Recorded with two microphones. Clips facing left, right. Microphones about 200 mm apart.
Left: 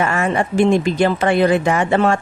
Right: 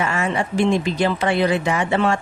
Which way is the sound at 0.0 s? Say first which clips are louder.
Left 4 dB; 50° left (ahead or behind).